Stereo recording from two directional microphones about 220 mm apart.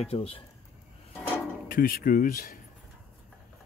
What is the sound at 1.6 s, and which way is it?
Speech, 40° left (ahead or behind).